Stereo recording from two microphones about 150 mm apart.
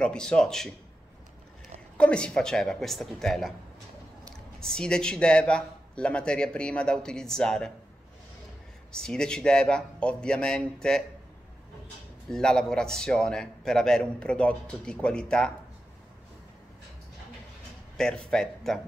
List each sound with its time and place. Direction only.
0.0 s a man's voice: 5° left (ahead or behind)
2.0 s a man's voice: 5° left (ahead or behind)
4.6 s a man's voice: 5° left (ahead or behind)
8.9 s a man's voice: 5° left (ahead or behind)
12.3 s a man's voice: 5° left (ahead or behind)
17.9 s a man's voice: 5° left (ahead or behind)